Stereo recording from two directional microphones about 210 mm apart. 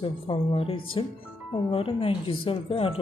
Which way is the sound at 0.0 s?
25° left (ahead or behind).